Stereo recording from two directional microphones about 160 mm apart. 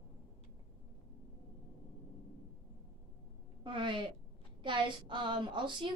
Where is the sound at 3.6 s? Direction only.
30° right (ahead or behind).